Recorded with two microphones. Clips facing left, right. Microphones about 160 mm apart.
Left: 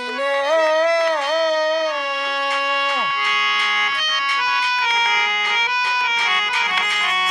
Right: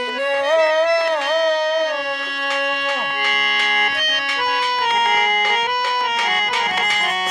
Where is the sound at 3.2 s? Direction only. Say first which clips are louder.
Right 1 dB; 50° right (ahead or behind).